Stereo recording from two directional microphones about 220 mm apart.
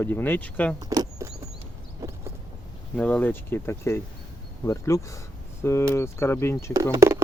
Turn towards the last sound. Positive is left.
turn(degrees=-10)  # may be behind; listen again after turning